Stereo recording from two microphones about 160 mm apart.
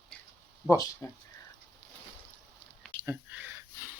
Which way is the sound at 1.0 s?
15° left (ahead or behind).